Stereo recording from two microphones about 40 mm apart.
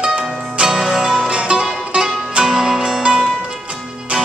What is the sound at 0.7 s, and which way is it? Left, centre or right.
Music, centre.